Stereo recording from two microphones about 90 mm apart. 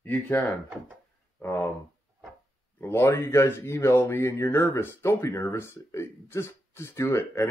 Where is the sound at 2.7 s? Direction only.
25° left (ahead or behind).